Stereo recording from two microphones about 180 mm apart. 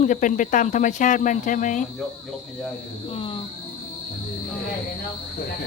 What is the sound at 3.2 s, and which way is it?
Speech, 30° left (ahead or behind).